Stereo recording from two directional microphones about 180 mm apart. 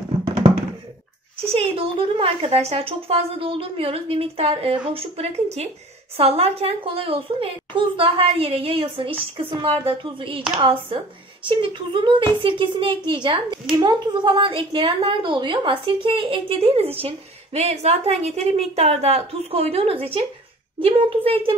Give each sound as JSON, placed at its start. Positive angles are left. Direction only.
{"t": 1.4, "sound": "a woman's voice", "side_deg": -30}